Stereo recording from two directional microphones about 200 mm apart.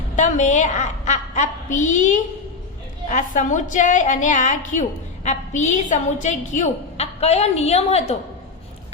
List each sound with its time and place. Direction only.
0.2 s a woman's voice: 35° left (ahead or behind)